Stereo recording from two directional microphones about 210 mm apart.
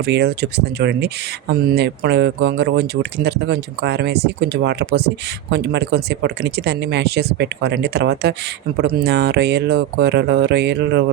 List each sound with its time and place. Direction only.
0.0 s speech: 50° right (ahead or behind)